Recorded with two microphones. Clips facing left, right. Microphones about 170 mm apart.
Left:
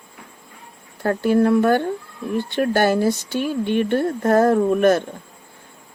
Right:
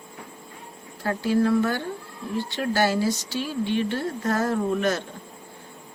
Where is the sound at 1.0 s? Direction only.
55° left (ahead or behind).